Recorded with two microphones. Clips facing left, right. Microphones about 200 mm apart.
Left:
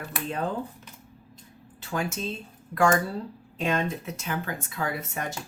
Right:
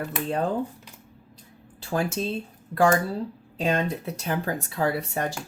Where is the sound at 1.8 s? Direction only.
35° right (ahead or behind).